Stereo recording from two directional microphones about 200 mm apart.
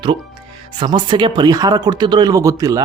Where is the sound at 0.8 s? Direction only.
20° right (ahead or behind).